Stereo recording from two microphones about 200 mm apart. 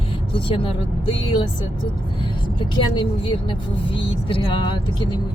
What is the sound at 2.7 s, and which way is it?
Speech, 25° left (ahead or behind).